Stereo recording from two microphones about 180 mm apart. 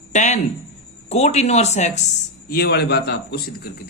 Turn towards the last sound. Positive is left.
turn(degrees=65)  # may be behind; listen again after turning